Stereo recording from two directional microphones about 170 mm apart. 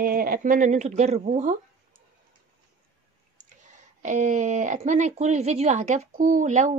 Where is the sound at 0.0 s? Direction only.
60° right (ahead or behind).